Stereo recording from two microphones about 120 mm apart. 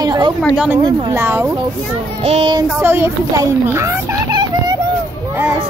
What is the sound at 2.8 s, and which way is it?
Speech, 20° right (ahead or behind).